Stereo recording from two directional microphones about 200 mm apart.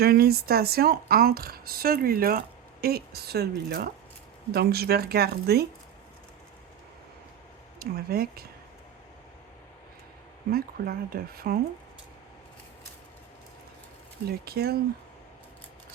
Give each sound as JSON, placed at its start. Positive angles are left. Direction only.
{"t": 0.0, "sound": "speech", "side_deg": -50}
{"t": 7.8, "sound": "speech", "side_deg": -50}
{"t": 10.5, "sound": "speech", "side_deg": -50}
{"t": 14.3, "sound": "speech", "side_deg": -50}